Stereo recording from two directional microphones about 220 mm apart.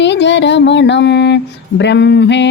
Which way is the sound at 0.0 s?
55° left (ahead or behind).